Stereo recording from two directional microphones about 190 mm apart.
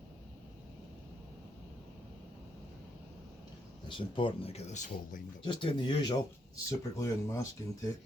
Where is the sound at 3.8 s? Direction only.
25° left (ahead or behind).